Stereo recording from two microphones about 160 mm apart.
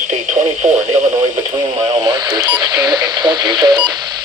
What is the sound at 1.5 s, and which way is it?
Speech, 25° right (ahead or behind).